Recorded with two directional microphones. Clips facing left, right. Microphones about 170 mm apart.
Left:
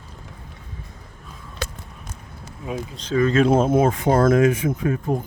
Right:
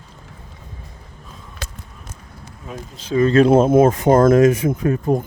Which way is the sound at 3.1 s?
20° right (ahead or behind).